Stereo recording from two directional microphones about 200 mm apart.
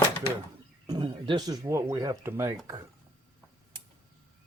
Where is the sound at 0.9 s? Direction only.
25° right (ahead or behind).